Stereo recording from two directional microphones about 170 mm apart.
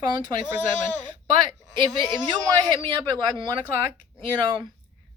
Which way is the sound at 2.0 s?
25° right (ahead or behind).